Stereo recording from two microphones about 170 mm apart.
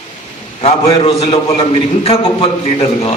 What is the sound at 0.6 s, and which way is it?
A man's voice, 35° left (ahead or behind).